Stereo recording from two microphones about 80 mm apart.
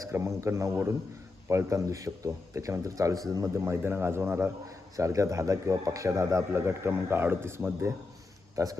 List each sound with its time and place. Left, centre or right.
0.0 s a man's voice: right
4.9 s a man's voice: right